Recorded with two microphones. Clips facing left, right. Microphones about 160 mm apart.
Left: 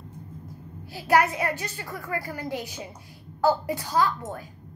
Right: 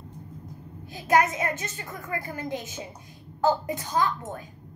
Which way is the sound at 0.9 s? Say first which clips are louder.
Left 1 dB; 20° right (ahead or behind).